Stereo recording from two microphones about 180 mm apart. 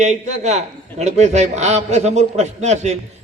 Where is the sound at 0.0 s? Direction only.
40° right (ahead or behind).